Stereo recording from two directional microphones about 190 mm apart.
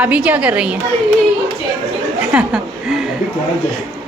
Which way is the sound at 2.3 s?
Centre (ahead or behind).